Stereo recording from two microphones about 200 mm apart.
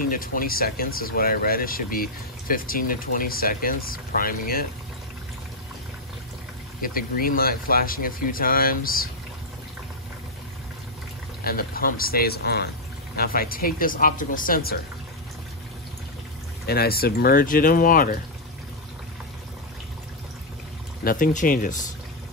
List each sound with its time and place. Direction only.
0.0 s speech: 45° left (ahead or behind)
6.8 s speech: 45° left (ahead or behind)
11.4 s speech: 45° left (ahead or behind)
16.6 s speech: 50° left (ahead or behind)
21.0 s speech: 45° left (ahead or behind)